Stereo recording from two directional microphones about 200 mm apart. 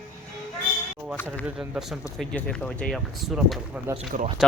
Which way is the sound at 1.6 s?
Centre (ahead or behind).